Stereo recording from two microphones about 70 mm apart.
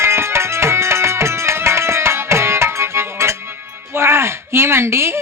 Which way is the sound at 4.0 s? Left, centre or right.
Right.